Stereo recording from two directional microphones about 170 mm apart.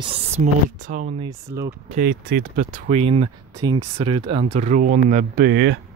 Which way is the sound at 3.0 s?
35° right (ahead or behind).